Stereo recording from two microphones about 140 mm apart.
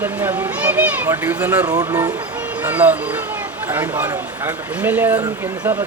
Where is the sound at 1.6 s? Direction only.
25° right (ahead or behind).